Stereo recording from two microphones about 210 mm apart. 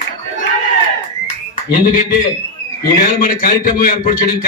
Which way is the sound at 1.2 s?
40° left (ahead or behind).